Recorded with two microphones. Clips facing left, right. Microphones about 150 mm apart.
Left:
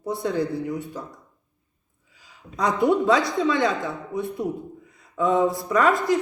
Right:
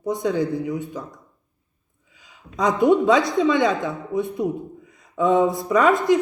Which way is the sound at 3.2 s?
20° right (ahead or behind).